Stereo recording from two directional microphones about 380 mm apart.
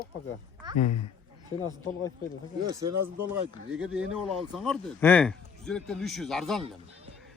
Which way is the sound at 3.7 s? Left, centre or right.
Centre.